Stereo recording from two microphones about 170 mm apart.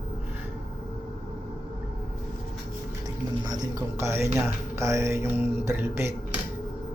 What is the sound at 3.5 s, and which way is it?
Speech, 20° right (ahead or behind).